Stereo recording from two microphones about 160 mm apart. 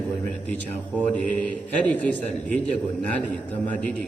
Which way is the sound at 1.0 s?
10° left (ahead or behind).